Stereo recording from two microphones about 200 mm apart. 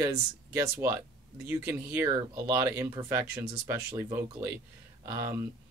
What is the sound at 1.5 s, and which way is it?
Speech, 10° right (ahead or behind).